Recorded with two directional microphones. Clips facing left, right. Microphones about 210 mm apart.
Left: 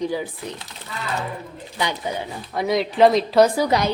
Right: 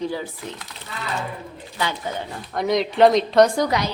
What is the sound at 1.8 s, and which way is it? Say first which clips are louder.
Speech: left 1 dB; 15° left (ahead or behind).